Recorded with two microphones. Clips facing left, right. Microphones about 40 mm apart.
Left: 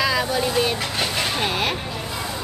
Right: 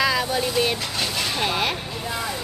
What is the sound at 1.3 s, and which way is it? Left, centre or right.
Speech, centre.